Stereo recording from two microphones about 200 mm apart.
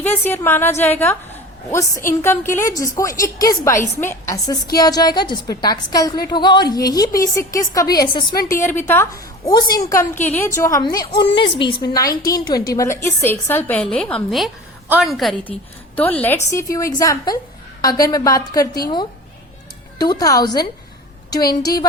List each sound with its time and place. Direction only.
0.1 s a woman's voice: 10° left (ahead or behind)
2.0 s a woman's voice: 10° left (ahead or behind)
20.0 s a woman's voice: 20° left (ahead or behind)